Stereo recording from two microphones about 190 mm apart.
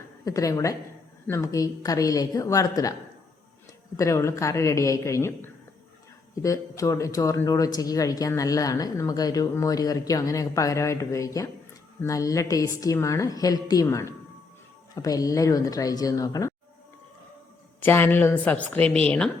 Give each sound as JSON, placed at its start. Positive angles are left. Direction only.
{"t": 0.3, "sound": "speech", "side_deg": 15}
{"t": 3.9, "sound": "speech", "side_deg": 15}
{"t": 17.7, "sound": "speech", "side_deg": 10}